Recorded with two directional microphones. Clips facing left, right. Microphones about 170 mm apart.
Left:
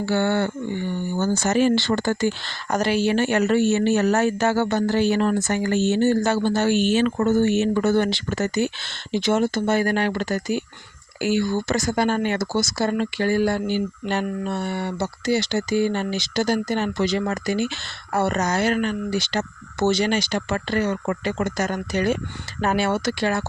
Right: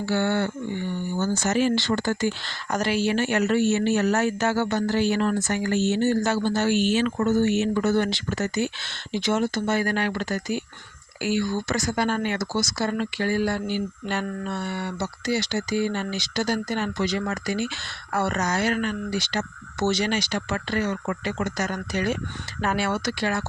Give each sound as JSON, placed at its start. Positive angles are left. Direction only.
{"t": 0.0, "sound": "speech", "side_deg": 55}
{"t": 2.6, "sound": "speech", "side_deg": 30}